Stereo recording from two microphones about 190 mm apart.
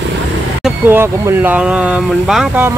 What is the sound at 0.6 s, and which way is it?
Speech, 10° right (ahead or behind).